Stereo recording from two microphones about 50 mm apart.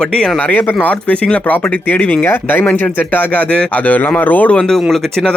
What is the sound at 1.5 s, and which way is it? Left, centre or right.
Speech, left.